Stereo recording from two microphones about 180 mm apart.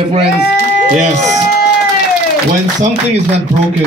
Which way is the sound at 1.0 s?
40° right (ahead or behind).